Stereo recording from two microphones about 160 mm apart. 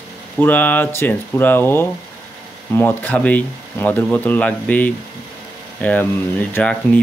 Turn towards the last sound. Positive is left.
turn(degrees=10)  # may be behind; listen again after turning